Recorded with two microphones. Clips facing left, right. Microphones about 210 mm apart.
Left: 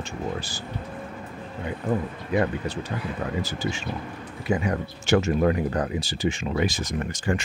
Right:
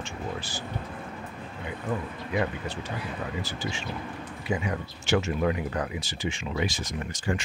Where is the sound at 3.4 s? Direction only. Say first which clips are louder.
Left 5 dB; 40° left (ahead or behind).